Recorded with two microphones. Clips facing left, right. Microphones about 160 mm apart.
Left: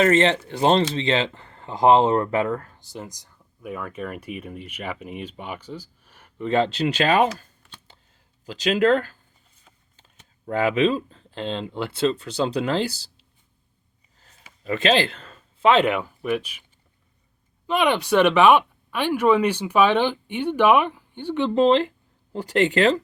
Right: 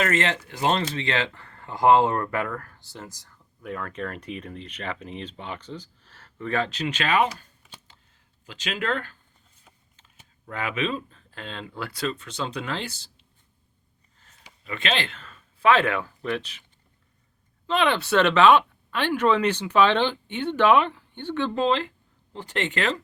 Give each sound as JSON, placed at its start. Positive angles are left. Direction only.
{"t": 0.0, "sound": "speech", "side_deg": 30}
{"t": 8.4, "sound": "speech", "side_deg": 35}
{"t": 10.4, "sound": "speech", "side_deg": 35}
{"t": 14.2, "sound": "a sound", "side_deg": 40}
{"t": 15.6, "sound": "speech", "side_deg": 20}
{"t": 17.7, "sound": "speech", "side_deg": 15}